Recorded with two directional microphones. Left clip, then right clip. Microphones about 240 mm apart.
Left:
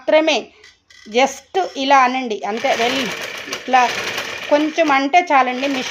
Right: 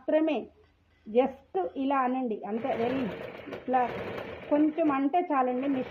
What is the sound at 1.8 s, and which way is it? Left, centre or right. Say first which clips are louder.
Speech: left 16 dB; left.